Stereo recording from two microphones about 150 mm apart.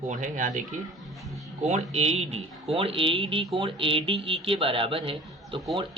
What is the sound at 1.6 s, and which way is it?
Speech, 45° right (ahead or behind).